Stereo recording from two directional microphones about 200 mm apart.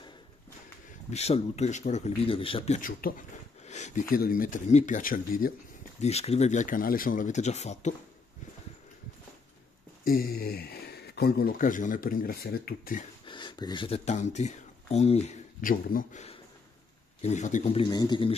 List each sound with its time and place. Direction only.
1.1 s speech: 30° left (ahead or behind)
5.9 s speech: 30° left (ahead or behind)
10.0 s speech: 45° left (ahead or behind)
13.2 s a man's voice: 25° left (ahead or behind)